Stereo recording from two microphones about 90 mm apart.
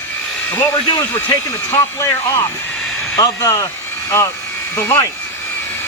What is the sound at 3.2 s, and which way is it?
Speech, 40° left (ahead or behind).